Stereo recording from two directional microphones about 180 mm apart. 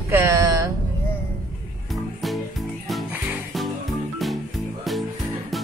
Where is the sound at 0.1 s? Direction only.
15° right (ahead or behind).